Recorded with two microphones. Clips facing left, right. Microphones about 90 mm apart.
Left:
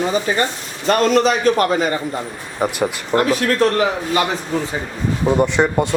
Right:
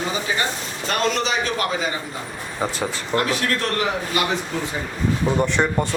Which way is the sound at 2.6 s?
15° left (ahead or behind).